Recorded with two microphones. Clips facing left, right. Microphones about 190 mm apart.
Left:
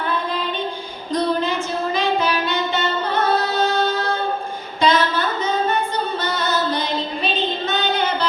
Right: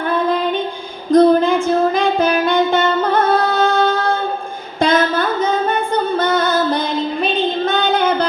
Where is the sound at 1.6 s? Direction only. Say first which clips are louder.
Right 7 dB; 50° right (ahead or behind).